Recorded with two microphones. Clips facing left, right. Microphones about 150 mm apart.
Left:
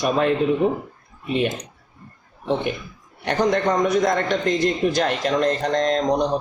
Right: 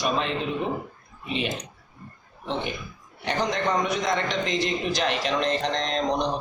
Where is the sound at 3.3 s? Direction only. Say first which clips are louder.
Left 6 dB; 50° left (ahead or behind).